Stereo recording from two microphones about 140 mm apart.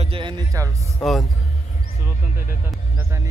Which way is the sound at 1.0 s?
Centre (ahead or behind).